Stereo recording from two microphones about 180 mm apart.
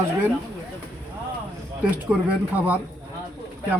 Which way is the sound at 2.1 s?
5° right (ahead or behind).